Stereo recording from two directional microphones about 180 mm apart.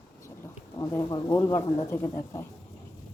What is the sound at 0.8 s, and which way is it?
A woman's voice, 20° left (ahead or behind).